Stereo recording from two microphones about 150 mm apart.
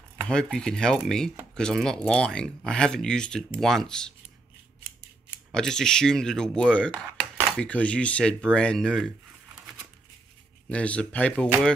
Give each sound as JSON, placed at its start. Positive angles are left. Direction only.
{"t": 0.3, "sound": "speech", "side_deg": 5}
{"t": 5.5, "sound": "speech", "side_deg": 5}
{"t": 10.7, "sound": "speech", "side_deg": 10}